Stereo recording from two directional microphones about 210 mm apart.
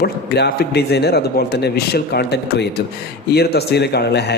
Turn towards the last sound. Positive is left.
turn(degrees=50)  # may be behind; listen again after turning